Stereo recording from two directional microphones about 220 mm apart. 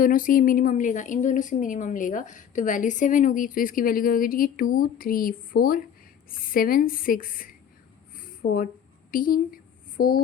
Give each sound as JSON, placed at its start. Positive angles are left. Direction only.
{"t": 0.0, "sound": "a woman's voice", "side_deg": 40}
{"t": 8.2, "sound": "a sound", "side_deg": 40}
{"t": 9.1, "sound": "a woman's voice", "side_deg": 40}